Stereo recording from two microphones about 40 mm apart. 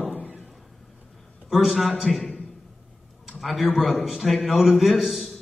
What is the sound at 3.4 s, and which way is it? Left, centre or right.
A man's voice, centre.